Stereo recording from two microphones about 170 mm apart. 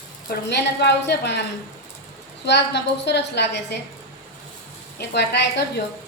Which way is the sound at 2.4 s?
90° left.